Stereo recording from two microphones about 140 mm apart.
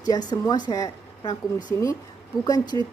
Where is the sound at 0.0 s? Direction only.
30° left (ahead or behind).